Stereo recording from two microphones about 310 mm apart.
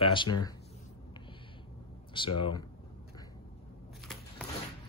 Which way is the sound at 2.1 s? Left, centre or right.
Centre.